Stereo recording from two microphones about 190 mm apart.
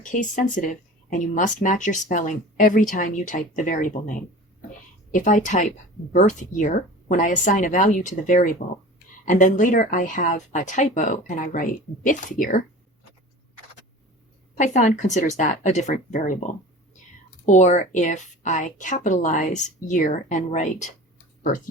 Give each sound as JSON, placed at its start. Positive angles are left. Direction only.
{"t": 0.0, "sound": "a woman's voice", "side_deg": 40}
{"t": 14.5, "sound": "a woman's voice", "side_deg": 40}
{"t": 17.4, "sound": "a woman's voice", "side_deg": 40}